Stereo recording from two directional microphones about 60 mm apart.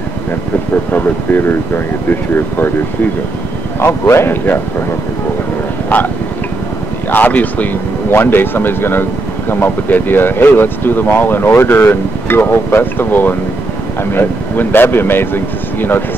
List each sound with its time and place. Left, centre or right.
2.0 s speech: left
3.8 s a man's voice: left
7.1 s speech: left
8.1 s speech: left